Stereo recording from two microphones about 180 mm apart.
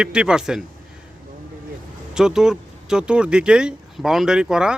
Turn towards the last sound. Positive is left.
turn(degrees=-5)  # may be behind; listen again after turning